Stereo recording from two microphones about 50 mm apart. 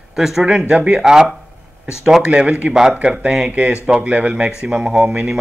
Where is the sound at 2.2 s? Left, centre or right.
Right.